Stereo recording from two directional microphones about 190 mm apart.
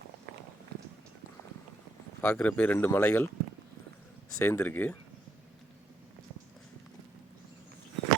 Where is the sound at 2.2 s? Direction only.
10° left (ahead or behind).